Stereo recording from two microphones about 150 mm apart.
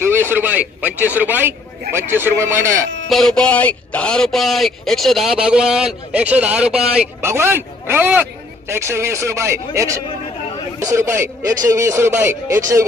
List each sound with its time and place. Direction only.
0.0 s speech: 15° right (ahead or behind)
3.1 s speech: 5° left (ahead or behind); by 12.8 s 20° right (ahead or behind)